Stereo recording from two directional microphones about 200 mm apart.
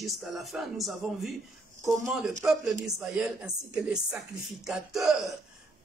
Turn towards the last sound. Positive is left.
turn(degrees=0)  # may be behind; listen again after turning